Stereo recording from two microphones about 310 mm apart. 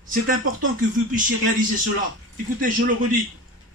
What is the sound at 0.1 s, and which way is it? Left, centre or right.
A man's voice, right.